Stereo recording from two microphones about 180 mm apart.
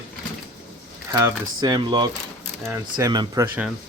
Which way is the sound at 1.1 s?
20° right (ahead or behind).